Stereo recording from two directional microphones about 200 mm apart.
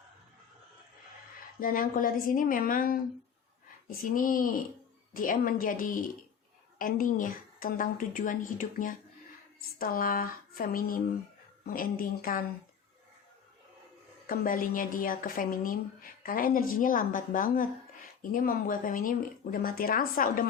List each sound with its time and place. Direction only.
1.5 s speech: 45° left (ahead or behind)
14.3 s speech: 45° left (ahead or behind)